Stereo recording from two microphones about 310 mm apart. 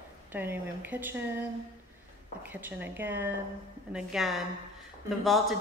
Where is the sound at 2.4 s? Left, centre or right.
Centre.